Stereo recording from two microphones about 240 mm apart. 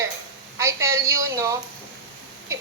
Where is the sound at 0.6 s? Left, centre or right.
Centre.